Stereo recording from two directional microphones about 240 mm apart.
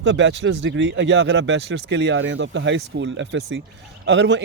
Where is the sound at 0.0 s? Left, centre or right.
Right.